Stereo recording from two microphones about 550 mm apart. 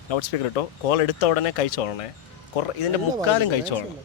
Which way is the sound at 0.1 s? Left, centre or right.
Left.